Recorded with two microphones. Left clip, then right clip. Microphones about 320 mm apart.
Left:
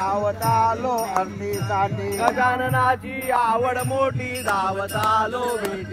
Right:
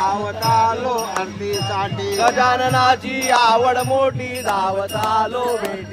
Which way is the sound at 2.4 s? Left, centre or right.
Right.